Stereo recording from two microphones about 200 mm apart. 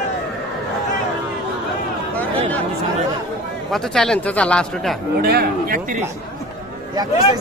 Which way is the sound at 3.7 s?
5° left (ahead or behind).